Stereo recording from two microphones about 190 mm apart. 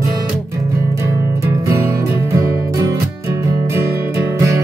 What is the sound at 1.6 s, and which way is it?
Music, 15° right (ahead or behind).